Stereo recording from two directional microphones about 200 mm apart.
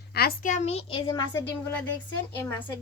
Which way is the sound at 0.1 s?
50° left (ahead or behind).